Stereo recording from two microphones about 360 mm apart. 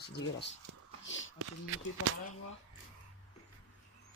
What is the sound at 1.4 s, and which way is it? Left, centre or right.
Speech, right.